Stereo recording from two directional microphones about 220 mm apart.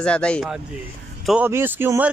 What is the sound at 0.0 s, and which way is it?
Speech, 5° left (ahead or behind).